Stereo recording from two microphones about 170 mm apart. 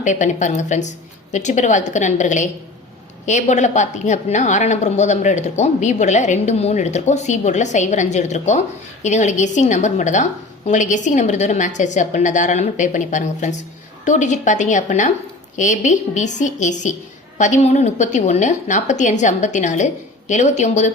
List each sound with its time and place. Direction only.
0.0 s a woman's voice: 45° left (ahead or behind)